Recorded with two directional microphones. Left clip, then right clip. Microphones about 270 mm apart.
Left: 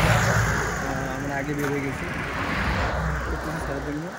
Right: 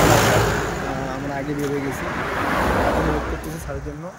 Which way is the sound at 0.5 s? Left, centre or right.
Centre.